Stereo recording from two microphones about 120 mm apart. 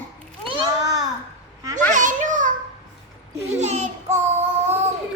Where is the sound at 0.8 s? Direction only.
30° right (ahead or behind).